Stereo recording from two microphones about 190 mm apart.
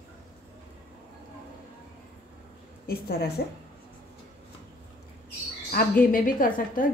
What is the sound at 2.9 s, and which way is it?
Speech, 55° left (ahead or behind).